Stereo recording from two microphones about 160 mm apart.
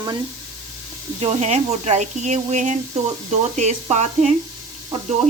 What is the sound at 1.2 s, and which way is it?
Speech, 40° right (ahead or behind).